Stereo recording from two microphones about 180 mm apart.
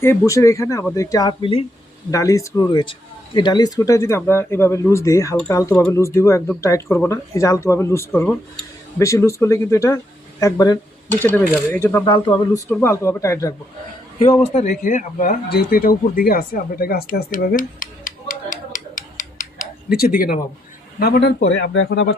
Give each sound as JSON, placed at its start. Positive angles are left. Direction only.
{"t": 0.0, "sound": "speech", "side_deg": 15}
{"t": 2.0, "sound": "speech", "side_deg": 20}
{"t": 12.0, "sound": "speech", "side_deg": 25}
{"t": 12.6, "sound": "speech", "side_deg": 10}
{"t": 14.2, "sound": "a man's voice", "side_deg": 35}